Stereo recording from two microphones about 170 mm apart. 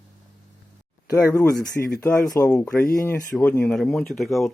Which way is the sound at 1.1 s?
20° left (ahead or behind).